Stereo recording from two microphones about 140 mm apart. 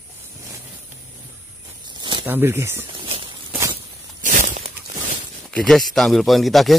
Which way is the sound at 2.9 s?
40° right (ahead or behind).